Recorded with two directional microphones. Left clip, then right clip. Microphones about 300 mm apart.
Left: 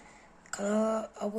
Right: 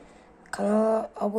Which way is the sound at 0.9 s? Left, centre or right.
Centre.